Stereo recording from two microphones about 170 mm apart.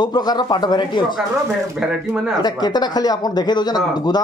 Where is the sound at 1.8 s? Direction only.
Centre (ahead or behind).